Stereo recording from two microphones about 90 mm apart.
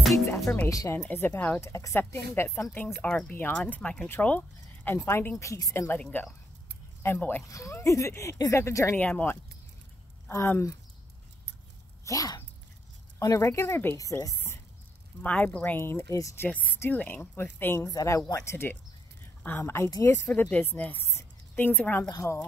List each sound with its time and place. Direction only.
0.7 s speech: 35° left (ahead or behind)
0.9 s speech: 20° left (ahead or behind)
1.7 s speech: 35° left (ahead or behind)
2.7 s speech: 20° left (ahead or behind)
4.9 s speech: 30° left (ahead or behind)
5.9 s speech: 20° left (ahead or behind)
7.4 s speech: 35° left (ahead or behind)
8.9 s speech: 20° left (ahead or behind)
12.0 s speech: 40° left (ahead or behind)
15.2 s speech: 15° left (ahead or behind); by 16.3 s 35° left (ahead or behind)
16.3 s speech: 15° left (ahead or behind)
17.7 s speech: 40° left (ahead or behind)
20.2 s speech: 15° left (ahead or behind)
22.1 s speech: 30° left (ahead or behind)